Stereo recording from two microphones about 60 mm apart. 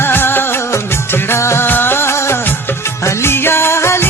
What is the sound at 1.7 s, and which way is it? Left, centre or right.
Music, left.